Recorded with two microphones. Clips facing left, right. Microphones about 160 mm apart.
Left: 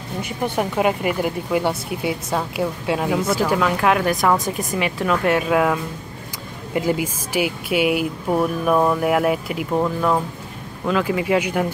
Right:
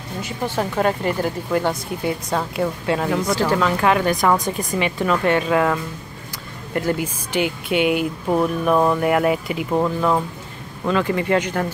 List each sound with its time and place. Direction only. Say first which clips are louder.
0.2 s speech: left 1 dB; 10° left (ahead or behind)